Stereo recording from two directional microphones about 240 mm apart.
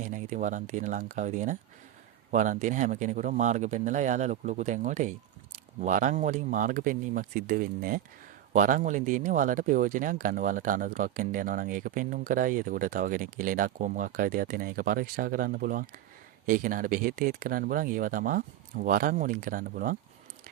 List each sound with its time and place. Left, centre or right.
0.0 s speech: right